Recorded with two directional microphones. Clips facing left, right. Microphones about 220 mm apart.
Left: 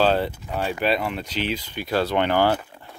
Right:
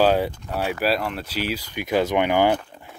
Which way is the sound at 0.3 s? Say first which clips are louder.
Right 1 dB; 5° left (ahead or behind).